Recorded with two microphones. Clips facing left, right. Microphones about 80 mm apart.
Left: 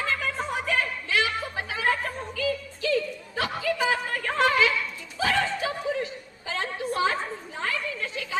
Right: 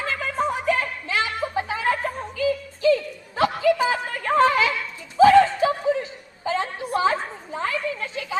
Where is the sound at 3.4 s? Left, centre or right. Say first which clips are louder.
Right 7 dB; right.